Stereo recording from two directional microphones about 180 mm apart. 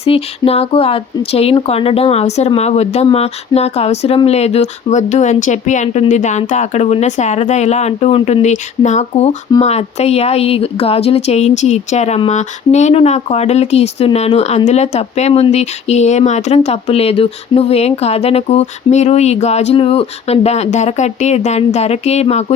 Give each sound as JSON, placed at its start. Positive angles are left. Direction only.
{"t": 0.0, "sound": "speech", "side_deg": 35}